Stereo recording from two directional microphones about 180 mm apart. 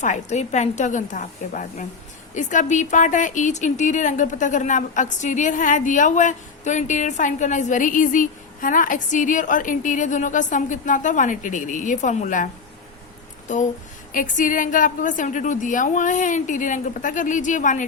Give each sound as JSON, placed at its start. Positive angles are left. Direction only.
{"t": 0.0, "sound": "speech", "side_deg": 40}
{"t": 13.5, "sound": "speech", "side_deg": 45}